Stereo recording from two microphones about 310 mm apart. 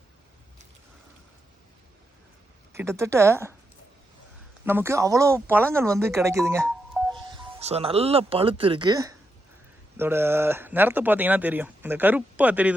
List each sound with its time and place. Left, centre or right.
2.7 s speech: centre
4.6 s speech: centre
6.7 s a sound: centre
7.3 s speech: centre